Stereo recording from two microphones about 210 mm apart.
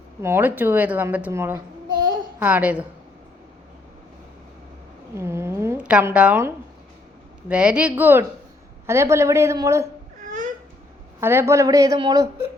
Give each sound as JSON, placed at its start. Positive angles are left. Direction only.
{"t": 0.2, "sound": "a woman's voice", "side_deg": -10}
{"t": 5.1, "sound": "a woman's voice", "side_deg": -10}
{"t": 11.2, "sound": "a woman's voice", "side_deg": -10}